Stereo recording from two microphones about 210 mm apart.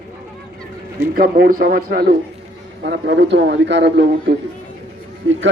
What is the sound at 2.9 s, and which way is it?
A man's voice, 55° right (ahead or behind).